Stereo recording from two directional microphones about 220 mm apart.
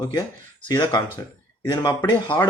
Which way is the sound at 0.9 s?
20° left (ahead or behind).